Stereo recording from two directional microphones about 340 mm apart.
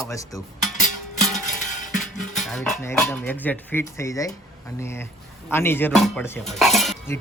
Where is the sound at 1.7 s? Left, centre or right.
Left.